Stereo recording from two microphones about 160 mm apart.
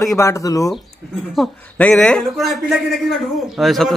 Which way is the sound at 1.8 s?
5° left (ahead or behind).